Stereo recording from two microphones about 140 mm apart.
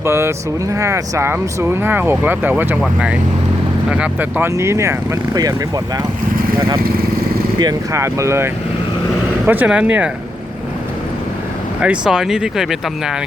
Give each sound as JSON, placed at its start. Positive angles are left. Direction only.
{"t": 0.0, "sound": "speech", "side_deg": -20}
{"t": 7.6, "sound": "speech", "side_deg": -25}
{"t": 9.5, "sound": "speech", "side_deg": -10}
{"t": 11.8, "sound": "speech", "side_deg": -5}